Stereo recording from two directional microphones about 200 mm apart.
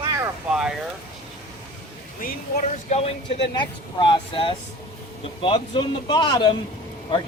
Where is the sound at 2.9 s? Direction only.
30° left (ahead or behind).